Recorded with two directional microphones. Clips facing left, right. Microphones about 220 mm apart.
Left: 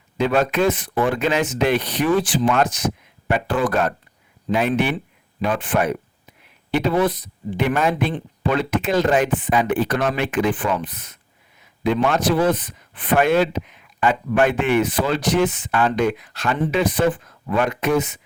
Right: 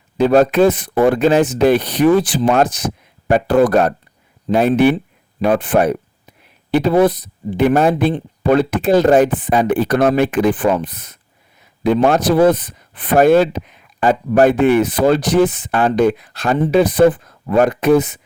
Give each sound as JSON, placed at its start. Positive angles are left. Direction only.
{"t": 0.2, "sound": "speech", "side_deg": -35}
{"t": 5.5, "sound": "a sound", "side_deg": -35}
{"t": 6.7, "sound": "speech", "side_deg": -35}